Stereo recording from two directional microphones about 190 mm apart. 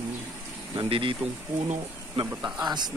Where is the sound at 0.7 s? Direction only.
25° right (ahead or behind).